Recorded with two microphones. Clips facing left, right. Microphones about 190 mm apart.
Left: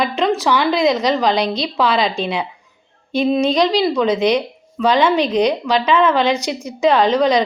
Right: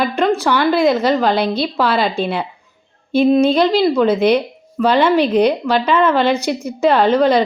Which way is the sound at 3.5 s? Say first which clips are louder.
Right 2 dB; 5° right (ahead or behind).